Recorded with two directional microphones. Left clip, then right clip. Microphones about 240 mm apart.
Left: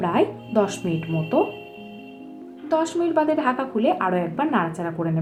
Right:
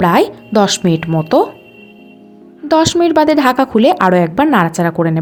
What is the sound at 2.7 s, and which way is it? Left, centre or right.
A woman's voice, right.